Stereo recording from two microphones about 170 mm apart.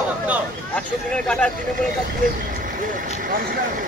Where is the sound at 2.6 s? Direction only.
55° right (ahead or behind).